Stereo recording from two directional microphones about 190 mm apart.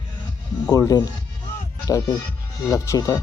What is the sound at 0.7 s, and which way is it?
Speech, 20° left (ahead or behind).